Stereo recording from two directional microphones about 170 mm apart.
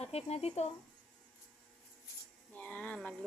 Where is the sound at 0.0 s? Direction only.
35° left (ahead or behind).